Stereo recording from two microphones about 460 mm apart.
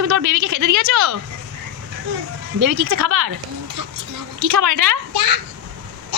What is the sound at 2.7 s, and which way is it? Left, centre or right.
Speech, right.